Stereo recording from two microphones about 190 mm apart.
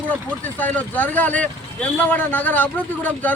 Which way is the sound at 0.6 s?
10° left (ahead or behind).